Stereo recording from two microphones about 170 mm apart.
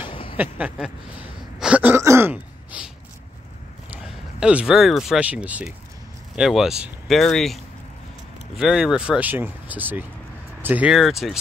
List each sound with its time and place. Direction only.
0.0 s a sound: 30° left (ahead or behind)
0.4 s speech: 10° right (ahead or behind)
1.6 s throat clearing: 10° right (ahead or behind)
3.9 s speech: 5° right (ahead or behind)